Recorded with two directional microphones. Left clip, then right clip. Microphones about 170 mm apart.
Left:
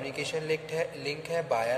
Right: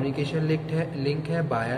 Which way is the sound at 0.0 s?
25° left (ahead or behind).